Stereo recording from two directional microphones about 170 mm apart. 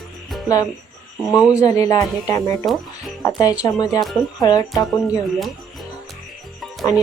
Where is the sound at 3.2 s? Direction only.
20° left (ahead or behind).